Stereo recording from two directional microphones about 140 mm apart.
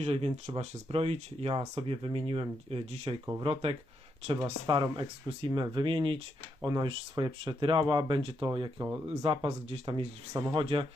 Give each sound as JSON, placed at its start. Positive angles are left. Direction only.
{"t": 0.0, "sound": "speech", "side_deg": -45}
{"t": 4.6, "sound": "speech", "side_deg": -35}
{"t": 9.0, "sound": "speech", "side_deg": -45}
{"t": 10.3, "sound": "speech", "side_deg": -25}
{"t": 10.6, "sound": "speech", "side_deg": -40}